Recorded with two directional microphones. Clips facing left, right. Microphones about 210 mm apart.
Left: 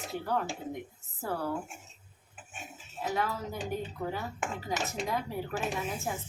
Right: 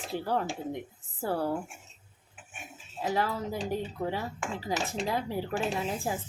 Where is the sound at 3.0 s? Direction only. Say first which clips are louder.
Right 3 dB; 30° right (ahead or behind).